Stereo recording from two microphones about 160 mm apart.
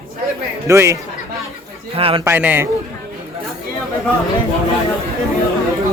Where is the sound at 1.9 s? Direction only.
35° right (ahead or behind).